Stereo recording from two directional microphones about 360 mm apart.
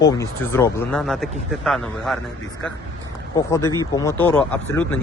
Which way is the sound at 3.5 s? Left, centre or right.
Centre.